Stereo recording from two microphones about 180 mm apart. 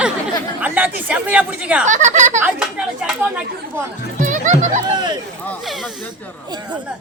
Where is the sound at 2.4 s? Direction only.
5° right (ahead or behind).